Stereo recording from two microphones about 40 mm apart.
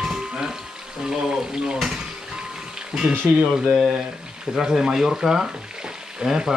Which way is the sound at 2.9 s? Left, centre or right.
Centre.